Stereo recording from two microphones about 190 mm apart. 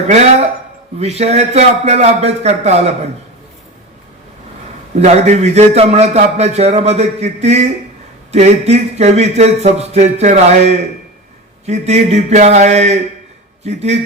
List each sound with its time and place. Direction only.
0.1 s a man's voice: 35° right (ahead or behind)
4.9 s a man's voice: 35° right (ahead or behind)